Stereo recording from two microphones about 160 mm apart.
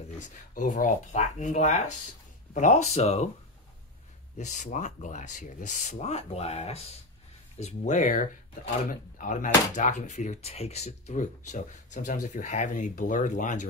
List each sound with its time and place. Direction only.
0.6 s speech: 55° left (ahead or behind)
4.4 s speech: 50° left (ahead or behind)